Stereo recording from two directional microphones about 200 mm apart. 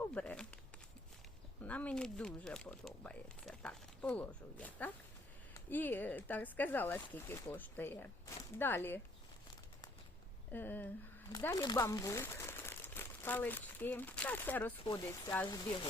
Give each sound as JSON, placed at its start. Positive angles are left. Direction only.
{"t": 0.0, "sound": "a sound", "side_deg": 5}
{"t": 1.6, "sound": "speech", "side_deg": 5}
{"t": 10.5, "sound": "speech", "side_deg": 10}
{"t": 14.8, "sound": "speech", "side_deg": 20}